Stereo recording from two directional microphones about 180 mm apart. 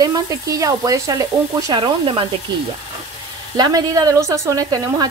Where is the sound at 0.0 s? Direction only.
20° right (ahead or behind).